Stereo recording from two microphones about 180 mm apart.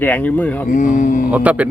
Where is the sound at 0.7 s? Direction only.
45° left (ahead or behind).